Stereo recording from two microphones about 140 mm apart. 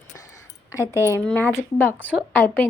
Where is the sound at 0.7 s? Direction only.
25° left (ahead or behind).